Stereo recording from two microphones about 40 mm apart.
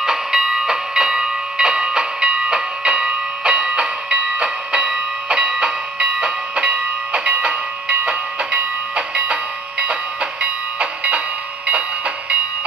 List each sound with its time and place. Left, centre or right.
0.0 s train: centre; by 11.8 s right